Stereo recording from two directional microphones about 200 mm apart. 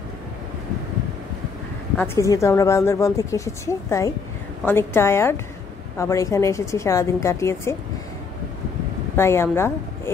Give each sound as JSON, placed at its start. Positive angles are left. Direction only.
{"t": 2.0, "sound": "a woman's voice", "side_deg": 15}
{"t": 9.1, "sound": "speech", "side_deg": 10}